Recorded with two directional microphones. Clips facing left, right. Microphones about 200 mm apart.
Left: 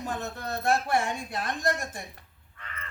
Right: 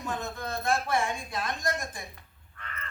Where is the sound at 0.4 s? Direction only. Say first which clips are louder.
Left 3 dB; 40° left (ahead or behind).